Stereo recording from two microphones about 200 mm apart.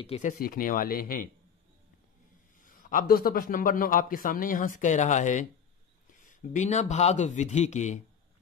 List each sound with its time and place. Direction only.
0.0 s speech: 30° left (ahead or behind)
0.3 s a man's voice: 45° left (ahead or behind)
2.7 s a man's voice: 40° left (ahead or behind)